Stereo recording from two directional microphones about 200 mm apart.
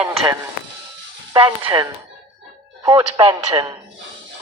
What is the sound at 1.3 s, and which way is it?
Speech, 20° right (ahead or behind).